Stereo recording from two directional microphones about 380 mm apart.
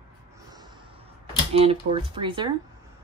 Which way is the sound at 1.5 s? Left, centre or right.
Centre.